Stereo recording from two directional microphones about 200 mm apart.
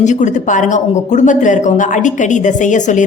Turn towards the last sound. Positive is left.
turn(degrees=40)  # may be behind; listen again after turning